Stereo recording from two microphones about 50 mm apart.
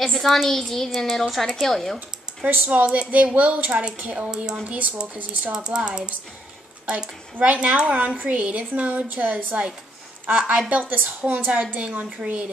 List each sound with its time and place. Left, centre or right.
0.0 s a woman's voice: centre
2.0 s speech: right
2.9 s a woman's voice: right
4.3 s speech: centre
4.6 s a woman's voice: right
5.5 s speech: centre
6.9 s a woman's voice: right
10.2 s speech: right
10.7 s a woman's voice: right